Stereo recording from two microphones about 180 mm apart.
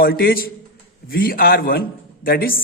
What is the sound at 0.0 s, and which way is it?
A man's voice, 55° left (ahead or behind).